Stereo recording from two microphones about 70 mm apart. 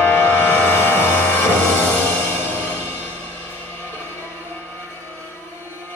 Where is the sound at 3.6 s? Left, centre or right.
Left.